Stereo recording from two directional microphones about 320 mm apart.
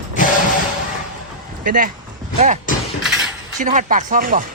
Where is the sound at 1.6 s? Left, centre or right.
Right.